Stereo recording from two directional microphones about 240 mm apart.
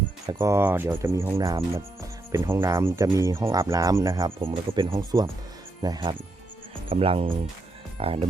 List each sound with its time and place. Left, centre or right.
0.3 s speech: centre